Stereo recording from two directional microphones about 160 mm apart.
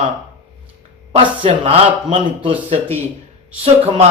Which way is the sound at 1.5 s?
40° right (ahead or behind).